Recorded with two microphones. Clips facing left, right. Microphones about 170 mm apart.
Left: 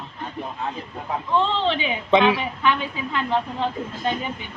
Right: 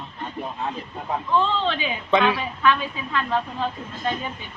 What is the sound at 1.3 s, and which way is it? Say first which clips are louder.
A woman's voice: left 1 dB; 25° left (ahead or behind).